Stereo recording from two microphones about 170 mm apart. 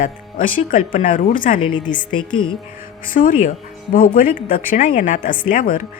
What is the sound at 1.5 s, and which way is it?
Speech, 30° left (ahead or behind).